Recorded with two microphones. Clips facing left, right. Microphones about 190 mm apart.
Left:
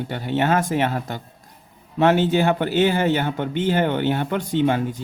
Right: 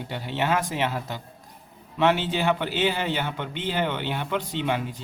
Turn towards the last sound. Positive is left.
turn(degrees=45)  # may be behind; listen again after turning